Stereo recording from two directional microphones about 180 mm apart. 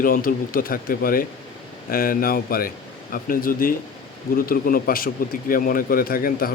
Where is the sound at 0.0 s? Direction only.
50° left (ahead or behind).